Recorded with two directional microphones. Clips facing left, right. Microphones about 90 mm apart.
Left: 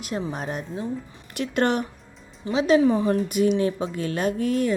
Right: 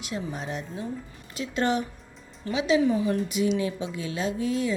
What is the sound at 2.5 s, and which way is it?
Speech, 40° left (ahead or behind).